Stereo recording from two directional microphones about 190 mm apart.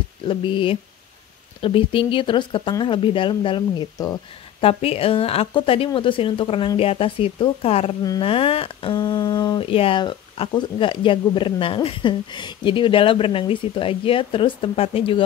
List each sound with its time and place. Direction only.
0.3 s speech: 25° left (ahead or behind)